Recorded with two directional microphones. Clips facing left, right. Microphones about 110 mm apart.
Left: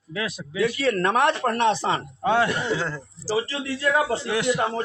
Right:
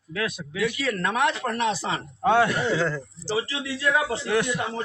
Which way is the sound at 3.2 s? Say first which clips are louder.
Left 3 dB; 35° left (ahead or behind).